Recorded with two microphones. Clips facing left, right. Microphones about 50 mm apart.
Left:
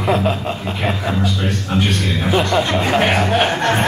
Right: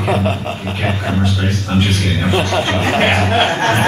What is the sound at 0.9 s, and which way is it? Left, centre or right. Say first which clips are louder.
Speech: right 1 dB; centre.